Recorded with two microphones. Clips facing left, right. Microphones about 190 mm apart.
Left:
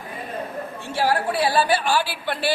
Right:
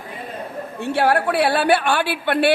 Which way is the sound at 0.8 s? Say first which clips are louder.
Right 5 dB; 65° right (ahead or behind).